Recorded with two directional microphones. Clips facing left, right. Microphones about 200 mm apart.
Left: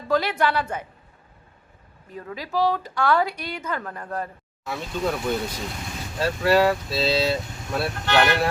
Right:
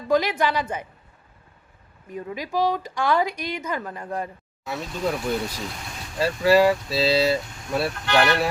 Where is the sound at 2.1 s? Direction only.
15° right (ahead or behind).